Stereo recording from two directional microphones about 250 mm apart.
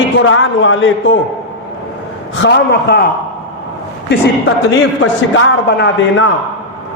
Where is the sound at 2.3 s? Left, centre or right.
Left.